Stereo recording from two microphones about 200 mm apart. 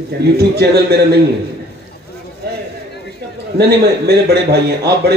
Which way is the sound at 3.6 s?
55° right (ahead or behind).